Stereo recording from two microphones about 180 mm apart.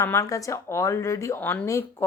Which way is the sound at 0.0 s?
15° left (ahead or behind).